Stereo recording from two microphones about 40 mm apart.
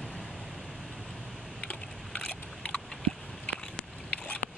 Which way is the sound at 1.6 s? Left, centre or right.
Left.